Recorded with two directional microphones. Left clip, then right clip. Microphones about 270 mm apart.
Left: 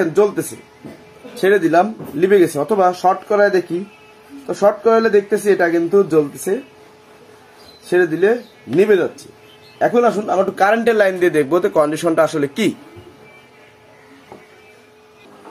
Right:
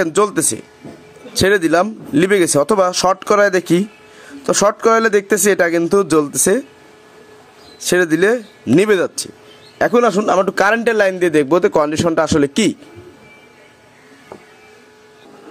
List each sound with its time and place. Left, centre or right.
0.0 s a man's voice: right
7.9 s a man's voice: right